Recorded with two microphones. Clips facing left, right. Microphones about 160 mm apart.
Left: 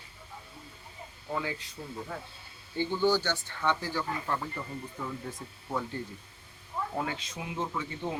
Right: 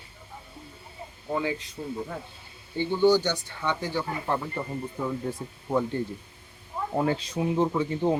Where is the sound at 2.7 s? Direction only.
15° right (ahead or behind).